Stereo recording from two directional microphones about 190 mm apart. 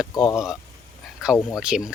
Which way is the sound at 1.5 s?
5° right (ahead or behind).